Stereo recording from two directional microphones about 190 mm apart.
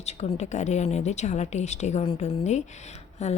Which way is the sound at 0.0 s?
35° left (ahead or behind).